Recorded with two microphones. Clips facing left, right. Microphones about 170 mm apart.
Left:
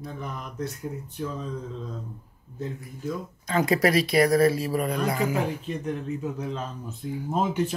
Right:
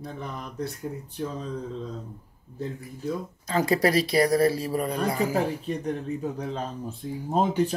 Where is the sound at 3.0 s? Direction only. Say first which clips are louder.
Right 1 dB; 35° right (ahead or behind).